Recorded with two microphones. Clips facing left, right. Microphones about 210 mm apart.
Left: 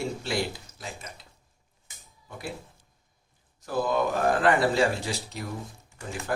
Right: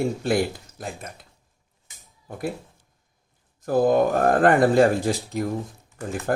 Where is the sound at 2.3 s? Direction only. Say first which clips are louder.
Right 8 dB; 50° right (ahead or behind).